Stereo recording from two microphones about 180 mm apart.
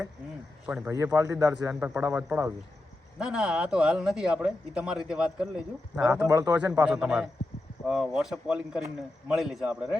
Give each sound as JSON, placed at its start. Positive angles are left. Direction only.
{"t": 0.9, "sound": "a man's voice", "side_deg": -15}
{"t": 6.2, "sound": "a man's voice", "side_deg": -20}
{"t": 6.8, "sound": "a man's voice", "side_deg": -5}